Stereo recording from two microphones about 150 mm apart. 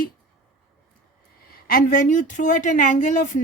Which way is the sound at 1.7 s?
65° left (ahead or behind).